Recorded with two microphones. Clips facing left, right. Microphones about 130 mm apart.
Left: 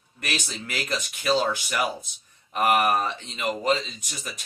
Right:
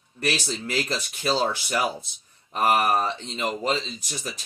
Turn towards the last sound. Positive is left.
turn(degrees=-35)  # may be behind; listen again after turning